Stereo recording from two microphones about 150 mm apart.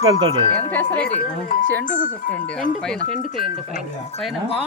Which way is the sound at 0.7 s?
10° left (ahead or behind).